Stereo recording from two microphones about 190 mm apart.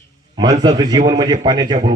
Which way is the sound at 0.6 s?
20° right (ahead or behind).